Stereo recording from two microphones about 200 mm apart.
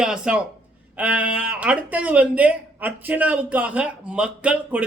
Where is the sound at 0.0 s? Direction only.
5° right (ahead or behind).